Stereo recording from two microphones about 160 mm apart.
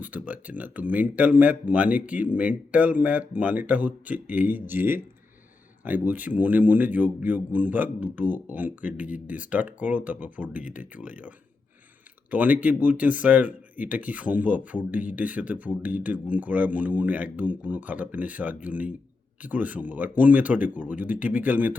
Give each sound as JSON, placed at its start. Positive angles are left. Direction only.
{"t": 0.0, "sound": "speech", "side_deg": -10}